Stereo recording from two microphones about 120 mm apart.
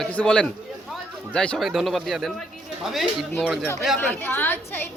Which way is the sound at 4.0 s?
15° left (ahead or behind).